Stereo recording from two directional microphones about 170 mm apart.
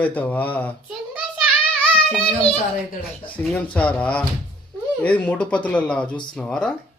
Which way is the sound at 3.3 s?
10° left (ahead or behind).